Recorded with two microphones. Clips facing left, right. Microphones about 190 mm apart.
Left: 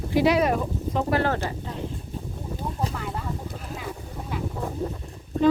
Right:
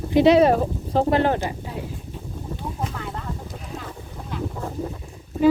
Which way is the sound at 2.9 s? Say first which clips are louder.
Even; centre (ahead or behind).